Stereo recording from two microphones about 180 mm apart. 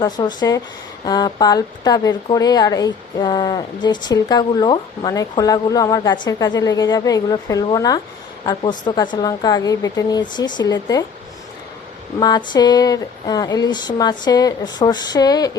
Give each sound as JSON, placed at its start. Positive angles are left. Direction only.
{"t": 0.0, "sound": "speech", "side_deg": 25}
{"t": 12.2, "sound": "speech", "side_deg": 25}